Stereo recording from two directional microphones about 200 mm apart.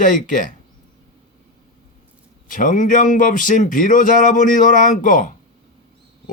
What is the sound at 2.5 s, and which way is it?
Speech, 40° left (ahead or behind).